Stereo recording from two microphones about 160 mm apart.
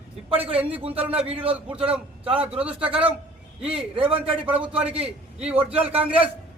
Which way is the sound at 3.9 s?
35° right (ahead or behind).